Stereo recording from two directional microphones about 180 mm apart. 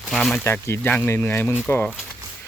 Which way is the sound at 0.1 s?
Centre (ahead or behind).